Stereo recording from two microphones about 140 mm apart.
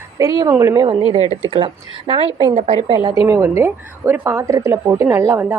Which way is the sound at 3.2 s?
20° right (ahead or behind).